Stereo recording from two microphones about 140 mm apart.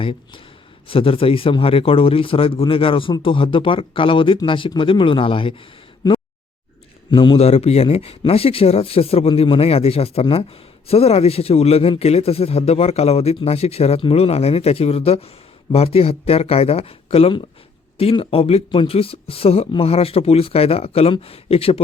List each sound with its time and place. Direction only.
0.0 s a man's voice: 40° left (ahead or behind)
6.0 s a sound: 30° left (ahead or behind)
7.1 s a man's voice: 35° left (ahead or behind)